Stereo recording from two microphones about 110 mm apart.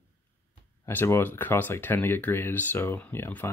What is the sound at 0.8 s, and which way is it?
Speech, 20° left (ahead or behind).